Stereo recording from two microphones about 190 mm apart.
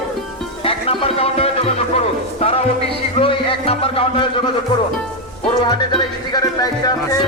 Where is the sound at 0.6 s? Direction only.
30° left (ahead or behind).